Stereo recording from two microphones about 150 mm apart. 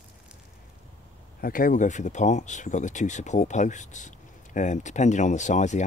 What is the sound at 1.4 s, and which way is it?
Speech, 70° left (ahead or behind).